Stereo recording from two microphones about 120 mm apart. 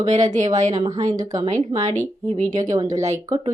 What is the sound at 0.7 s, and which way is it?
Speech, 35° right (ahead or behind).